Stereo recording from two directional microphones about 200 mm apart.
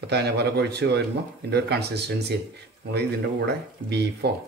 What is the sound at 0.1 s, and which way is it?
Speech, 55° right (ahead or behind).